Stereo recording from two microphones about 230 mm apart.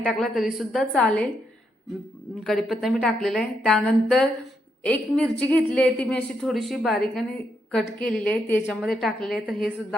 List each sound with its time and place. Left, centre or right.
0.0 s a woman's voice: centre
2.4 s a woman's voice: centre